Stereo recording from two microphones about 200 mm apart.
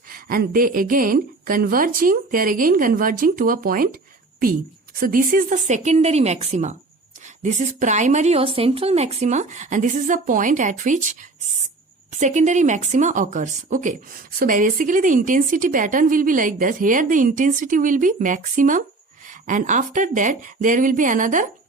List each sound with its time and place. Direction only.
0.1 s a woman's voice: 45° right (ahead or behind)
4.9 s speech: 45° right (ahead or behind)